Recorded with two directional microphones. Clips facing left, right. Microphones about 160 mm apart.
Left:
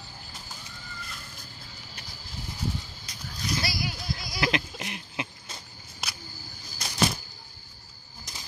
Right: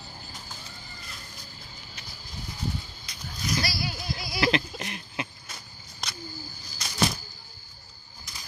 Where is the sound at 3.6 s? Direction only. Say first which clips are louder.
Even; 20° left (ahead or behind).